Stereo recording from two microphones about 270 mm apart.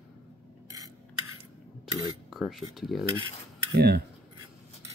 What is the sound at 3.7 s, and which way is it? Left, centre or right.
Speech, right.